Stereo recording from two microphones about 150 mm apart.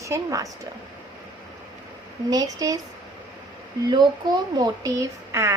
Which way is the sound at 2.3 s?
25° right (ahead or behind).